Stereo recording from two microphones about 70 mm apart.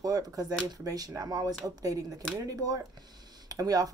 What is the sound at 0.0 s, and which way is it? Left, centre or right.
Speech, right.